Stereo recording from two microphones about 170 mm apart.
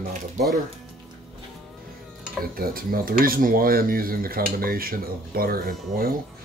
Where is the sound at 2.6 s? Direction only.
60° right (ahead or behind).